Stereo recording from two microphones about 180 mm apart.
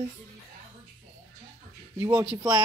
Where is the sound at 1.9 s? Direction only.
10° right (ahead or behind).